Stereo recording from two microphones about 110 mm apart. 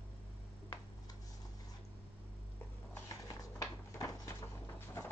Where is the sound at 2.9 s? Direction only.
25° left (ahead or behind).